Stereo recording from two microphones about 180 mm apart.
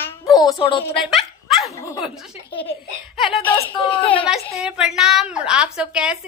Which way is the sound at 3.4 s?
10° left (ahead or behind).